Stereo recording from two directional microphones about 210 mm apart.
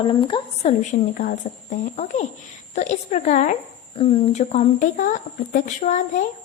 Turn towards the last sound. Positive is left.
turn(degrees=35)  # may be behind; listen again after turning